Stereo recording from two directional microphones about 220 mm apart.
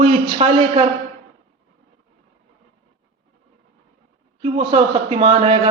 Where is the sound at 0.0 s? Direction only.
25° right (ahead or behind).